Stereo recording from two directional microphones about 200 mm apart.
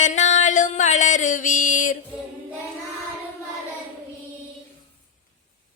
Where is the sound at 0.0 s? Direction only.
35° left (ahead or behind).